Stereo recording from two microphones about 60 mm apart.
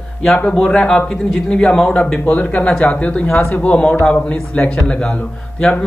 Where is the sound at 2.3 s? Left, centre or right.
Left.